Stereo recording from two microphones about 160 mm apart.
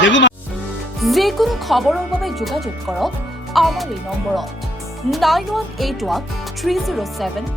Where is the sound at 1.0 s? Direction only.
Centre (ahead or behind).